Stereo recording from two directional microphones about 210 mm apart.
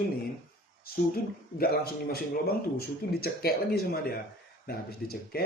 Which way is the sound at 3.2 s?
45° left (ahead or behind).